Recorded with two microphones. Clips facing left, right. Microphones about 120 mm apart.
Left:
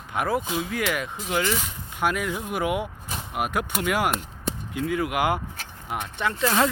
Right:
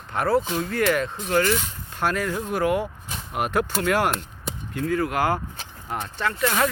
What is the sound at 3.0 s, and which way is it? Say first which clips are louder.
Speech: right 1 dB; 5° left (ahead or behind).